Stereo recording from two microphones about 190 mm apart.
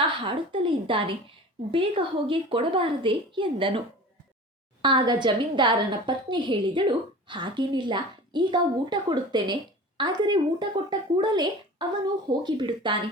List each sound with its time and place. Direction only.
0.0 s a woman's voice: 25° right (ahead or behind)